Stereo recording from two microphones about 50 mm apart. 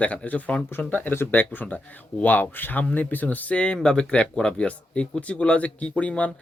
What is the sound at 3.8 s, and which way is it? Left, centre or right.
Speech, centre.